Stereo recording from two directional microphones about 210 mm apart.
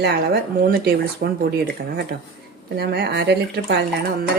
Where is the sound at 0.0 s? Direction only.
50° right (ahead or behind).